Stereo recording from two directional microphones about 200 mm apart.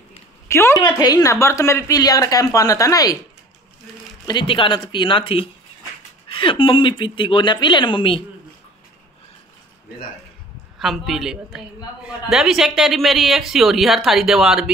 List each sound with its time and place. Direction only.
0.5 s speech: 15° left (ahead or behind)
4.3 s speech: 25° left (ahead or behind)
10.8 s a woman's voice: centre (ahead or behind)